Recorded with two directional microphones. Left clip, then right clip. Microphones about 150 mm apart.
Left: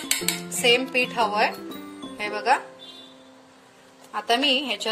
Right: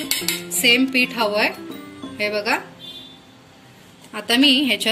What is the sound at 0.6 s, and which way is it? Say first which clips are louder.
A woman's voice: right 4 dB; 60° left (ahead or behind).